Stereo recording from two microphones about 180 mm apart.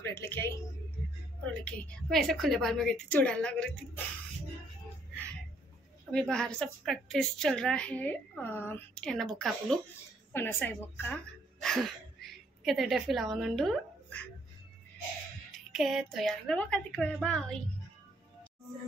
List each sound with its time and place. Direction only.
0.0 s a woman's voice: 15° left (ahead or behind)
1.5 s a woman's voice: 5° left (ahead or behind)
6.1 s a woman's voice: 5° left (ahead or behind)
15.7 s a woman's voice: centre (ahead or behind)